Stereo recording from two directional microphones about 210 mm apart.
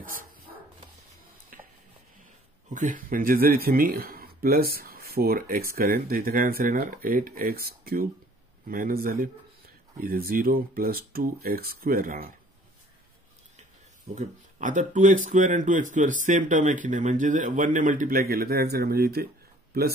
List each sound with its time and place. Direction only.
0.0 s dog: 40° right (ahead or behind)
1.5 s chopping: 40° right (ahead or behind)
2.7 s speech: 40° right (ahead or behind)
14.1 s speech: 35° right (ahead or behind)